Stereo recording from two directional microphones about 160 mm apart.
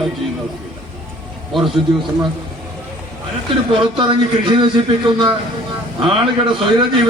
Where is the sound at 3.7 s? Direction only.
30° right (ahead or behind).